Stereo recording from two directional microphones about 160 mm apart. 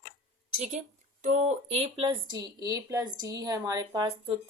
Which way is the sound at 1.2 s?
45° right (ahead or behind).